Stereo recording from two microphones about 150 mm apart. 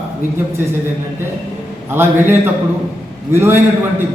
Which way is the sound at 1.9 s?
15° right (ahead or behind).